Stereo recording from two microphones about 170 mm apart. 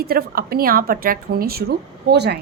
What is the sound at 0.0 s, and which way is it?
Speech, 60° right (ahead or behind).